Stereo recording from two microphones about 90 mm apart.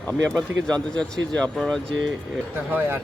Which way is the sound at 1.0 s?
10° left (ahead or behind).